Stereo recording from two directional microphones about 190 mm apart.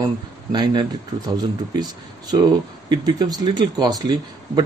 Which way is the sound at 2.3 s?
20° right (ahead or behind).